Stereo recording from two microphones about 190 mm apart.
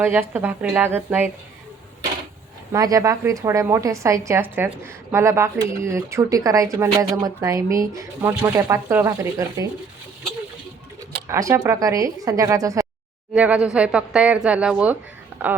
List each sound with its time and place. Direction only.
0.0 s a woman's voice: 10° right (ahead or behind)
2.7 s a woman's voice: 20° right (ahead or behind)
11.3 s a woman's voice: 15° right (ahead or behind)
13.3 s speech: 5° right (ahead or behind)